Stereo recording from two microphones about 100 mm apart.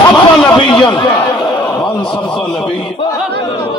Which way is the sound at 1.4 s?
10° left (ahead or behind).